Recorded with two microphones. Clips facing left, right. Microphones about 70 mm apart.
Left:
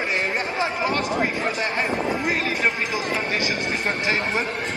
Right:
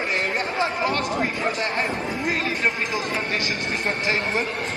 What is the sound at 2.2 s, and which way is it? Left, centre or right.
A man's voice, left.